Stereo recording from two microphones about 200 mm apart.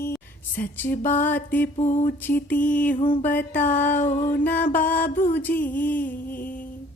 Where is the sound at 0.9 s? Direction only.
40° left (ahead or behind).